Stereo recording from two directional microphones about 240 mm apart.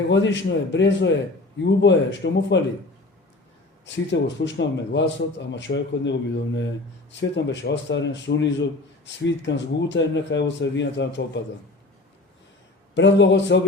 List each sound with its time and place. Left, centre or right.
0.1 s speech: left
3.8 s speech: left
12.9 s speech: left